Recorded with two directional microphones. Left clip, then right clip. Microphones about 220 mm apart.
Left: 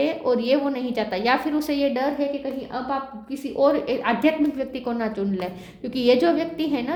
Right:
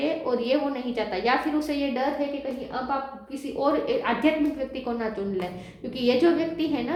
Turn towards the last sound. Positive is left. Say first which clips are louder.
# left 2 dB
turn(degrees=45)  # may be behind; listen again after turning